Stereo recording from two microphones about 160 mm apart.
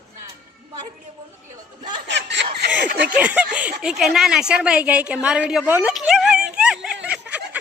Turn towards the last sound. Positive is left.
turn(degrees=-5)  # may be behind; listen again after turning